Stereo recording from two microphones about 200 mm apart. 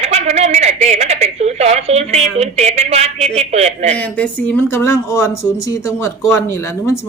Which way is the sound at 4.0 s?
5° left (ahead or behind).